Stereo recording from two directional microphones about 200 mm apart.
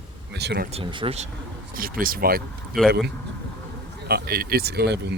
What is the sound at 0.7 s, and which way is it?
Speech, 25° right (ahead or behind).